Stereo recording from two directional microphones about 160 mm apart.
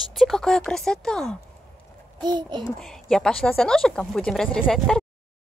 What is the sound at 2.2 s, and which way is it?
Speech, 25° right (ahead or behind).